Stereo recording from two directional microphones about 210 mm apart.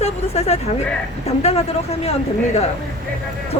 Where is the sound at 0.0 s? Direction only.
30° left (ahead or behind).